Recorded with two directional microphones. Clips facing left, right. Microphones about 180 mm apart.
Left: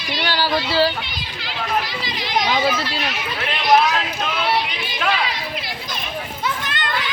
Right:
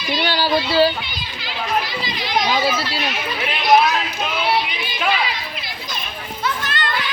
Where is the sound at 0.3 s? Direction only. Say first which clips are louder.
Right 1 dB; 15° right (ahead or behind).